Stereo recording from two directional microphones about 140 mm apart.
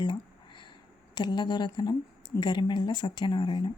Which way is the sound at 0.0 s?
35° left (ahead or behind).